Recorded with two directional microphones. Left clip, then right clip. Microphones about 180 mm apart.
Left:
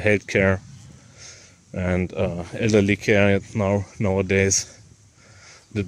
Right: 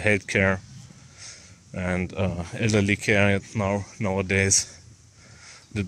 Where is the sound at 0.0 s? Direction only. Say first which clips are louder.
Left 2 dB; 30° left (ahead or behind).